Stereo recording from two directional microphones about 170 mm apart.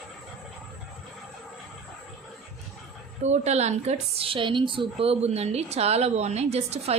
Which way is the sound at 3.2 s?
40° right (ahead or behind).